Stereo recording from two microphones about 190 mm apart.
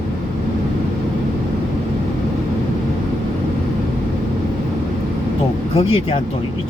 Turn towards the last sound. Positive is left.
turn(degrees=30)  # may be behind; listen again after turning